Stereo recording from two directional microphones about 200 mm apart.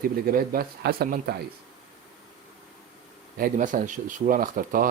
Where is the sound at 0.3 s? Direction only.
45° right (ahead or behind).